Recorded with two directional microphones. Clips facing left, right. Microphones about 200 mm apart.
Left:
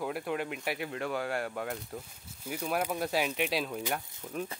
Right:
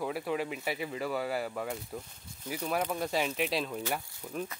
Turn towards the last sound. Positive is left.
turn(degrees=0)  # may be behind; listen again after turning